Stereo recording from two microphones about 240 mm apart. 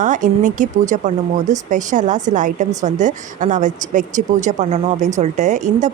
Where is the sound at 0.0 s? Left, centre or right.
Right.